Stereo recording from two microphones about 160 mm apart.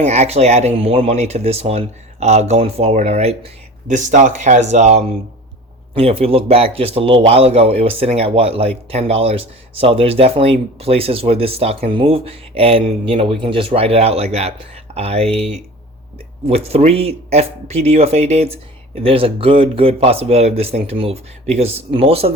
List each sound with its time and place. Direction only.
0.0 s speech: 40° right (ahead or behind)